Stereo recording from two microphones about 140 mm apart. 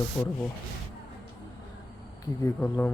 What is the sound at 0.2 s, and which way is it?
Speech, 25° left (ahead or behind).